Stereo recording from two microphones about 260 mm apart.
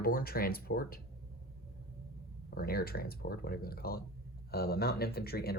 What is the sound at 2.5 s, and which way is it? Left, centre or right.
Speech, left.